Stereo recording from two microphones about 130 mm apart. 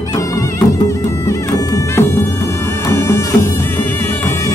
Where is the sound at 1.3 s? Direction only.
20° left (ahead or behind).